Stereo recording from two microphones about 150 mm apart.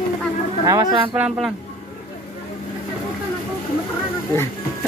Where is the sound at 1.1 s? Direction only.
5° right (ahead or behind).